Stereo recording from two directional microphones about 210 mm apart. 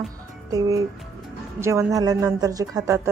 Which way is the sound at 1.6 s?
15° right (ahead or behind).